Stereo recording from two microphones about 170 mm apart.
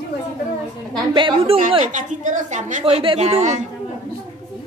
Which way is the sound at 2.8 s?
30° right (ahead or behind).